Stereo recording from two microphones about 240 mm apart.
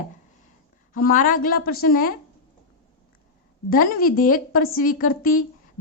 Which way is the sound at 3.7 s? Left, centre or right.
Left.